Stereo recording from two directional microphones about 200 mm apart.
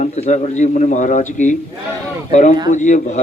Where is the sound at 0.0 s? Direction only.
35° left (ahead or behind).